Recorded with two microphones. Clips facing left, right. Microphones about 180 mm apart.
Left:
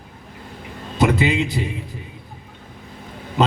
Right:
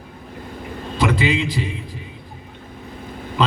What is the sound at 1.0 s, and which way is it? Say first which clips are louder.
Speech: left 2 dB; 50° left (ahead or behind).